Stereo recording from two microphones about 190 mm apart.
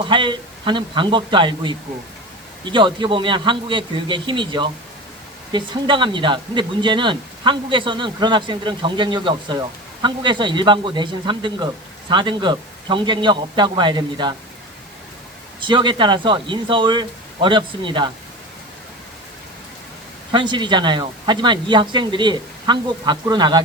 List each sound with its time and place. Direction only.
0.0 s speech: 25° right (ahead or behind)
15.6 s speech: 25° right (ahead or behind)
20.3 s speech: 25° right (ahead or behind)